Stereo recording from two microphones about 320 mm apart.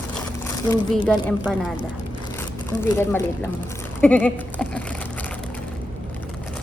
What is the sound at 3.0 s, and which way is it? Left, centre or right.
A woman's voice, centre.